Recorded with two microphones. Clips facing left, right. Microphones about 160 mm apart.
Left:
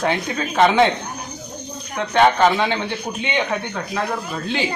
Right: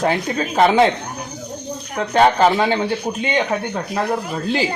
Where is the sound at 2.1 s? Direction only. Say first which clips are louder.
Right 1 dB; 35° right (ahead or behind).